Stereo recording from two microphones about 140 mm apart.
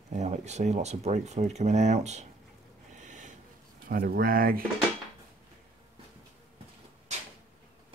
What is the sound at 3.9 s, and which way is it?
Speech, 90° right.